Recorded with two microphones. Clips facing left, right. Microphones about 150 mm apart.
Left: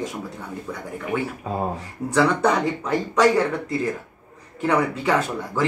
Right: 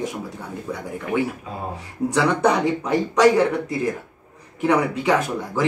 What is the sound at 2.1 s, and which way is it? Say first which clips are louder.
A man's voice: even; 15° right (ahead or behind).